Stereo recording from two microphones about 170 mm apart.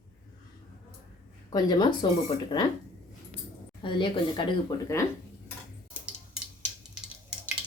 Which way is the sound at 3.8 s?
30° left (ahead or behind).